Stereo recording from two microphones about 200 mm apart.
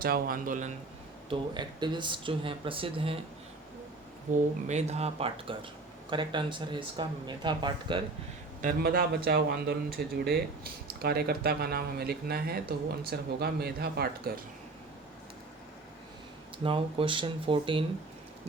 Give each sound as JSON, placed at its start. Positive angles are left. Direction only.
{"t": 0.0, "sound": "speech", "side_deg": -45}
{"t": 1.3, "sound": "speech", "side_deg": -20}
{"t": 4.3, "sound": "speech", "side_deg": -40}
{"t": 8.6, "sound": "speech", "side_deg": -50}
{"t": 16.6, "sound": "speech", "side_deg": -25}